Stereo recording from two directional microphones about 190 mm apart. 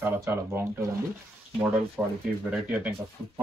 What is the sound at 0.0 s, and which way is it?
Speech, 15° right (ahead or behind).